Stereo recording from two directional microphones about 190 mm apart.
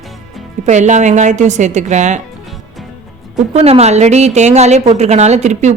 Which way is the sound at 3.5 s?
35° right (ahead or behind).